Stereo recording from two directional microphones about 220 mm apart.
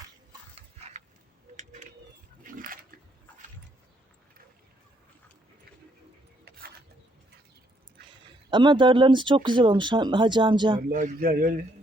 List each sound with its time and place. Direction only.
1.5 s a sound: 35° right (ahead or behind)
2.4 s pig: 40° right (ahead or behind)
8.4 s speech: 20° right (ahead or behind)
10.8 s a man's voice: 35° right (ahead or behind)